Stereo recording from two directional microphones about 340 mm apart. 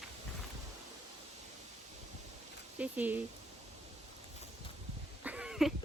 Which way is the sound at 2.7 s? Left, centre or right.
Centre.